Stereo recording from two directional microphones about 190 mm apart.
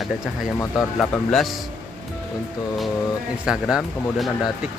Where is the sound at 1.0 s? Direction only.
Centre (ahead or behind).